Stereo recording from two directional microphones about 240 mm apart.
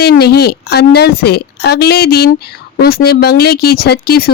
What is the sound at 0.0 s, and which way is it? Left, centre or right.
Speech, left.